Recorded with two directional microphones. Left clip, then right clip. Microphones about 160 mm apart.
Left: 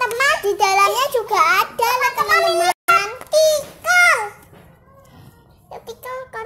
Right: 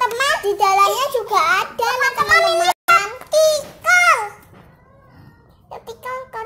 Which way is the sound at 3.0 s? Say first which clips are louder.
Even; 20° left (ahead or behind).